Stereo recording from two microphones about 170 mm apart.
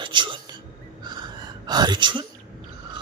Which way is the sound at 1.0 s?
25° right (ahead or behind).